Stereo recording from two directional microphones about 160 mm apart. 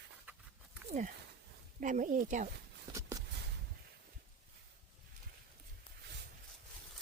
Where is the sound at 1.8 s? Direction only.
55° right (ahead or behind).